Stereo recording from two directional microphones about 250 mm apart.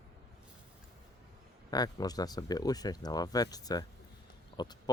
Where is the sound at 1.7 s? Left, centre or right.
Centre.